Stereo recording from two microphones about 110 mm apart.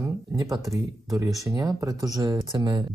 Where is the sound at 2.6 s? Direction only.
45° right (ahead or behind).